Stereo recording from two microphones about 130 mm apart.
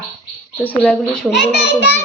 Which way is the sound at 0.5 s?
10° left (ahead or behind).